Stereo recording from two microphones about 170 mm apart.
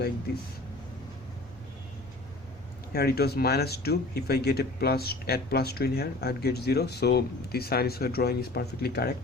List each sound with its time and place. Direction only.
0.3 s speech: 70° left (ahead or behind)
2.9 s speech: 70° left (ahead or behind)